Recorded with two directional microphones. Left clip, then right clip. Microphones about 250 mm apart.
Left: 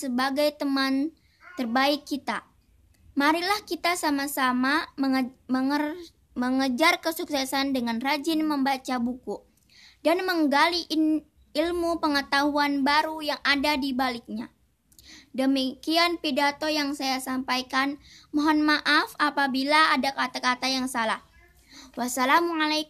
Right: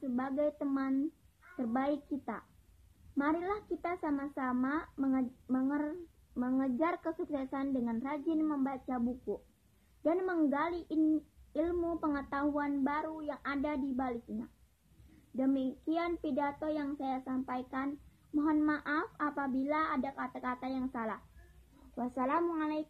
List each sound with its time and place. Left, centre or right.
0.1 s a woman's voice: left